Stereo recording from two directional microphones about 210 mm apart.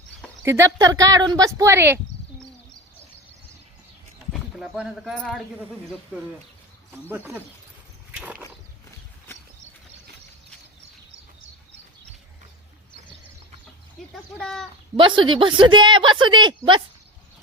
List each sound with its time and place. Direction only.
0.4 s a woman's voice: 10° right (ahead or behind)
4.3 s speech: centre (ahead or behind)
7.1 s a woman's voice: 10° right (ahead or behind)
8.1 s a sound: 5° right (ahead or behind)
14.1 s a sound: centre (ahead or behind)
14.9 s a woman's voice: 25° right (ahead or behind)